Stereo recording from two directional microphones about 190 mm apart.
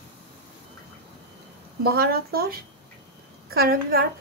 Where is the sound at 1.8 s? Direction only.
55° right (ahead or behind).